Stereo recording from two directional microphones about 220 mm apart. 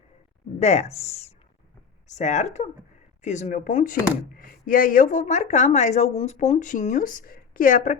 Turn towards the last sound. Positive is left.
turn(degrees=40)  # may be behind; listen again after turning